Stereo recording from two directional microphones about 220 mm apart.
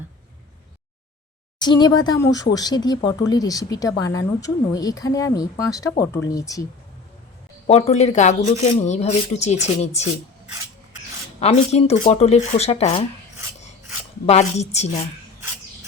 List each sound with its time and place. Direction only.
1.5 s speech: 20° left (ahead or behind)
7.7 s speech: 30° left (ahead or behind)
14.3 s speech: 30° left (ahead or behind)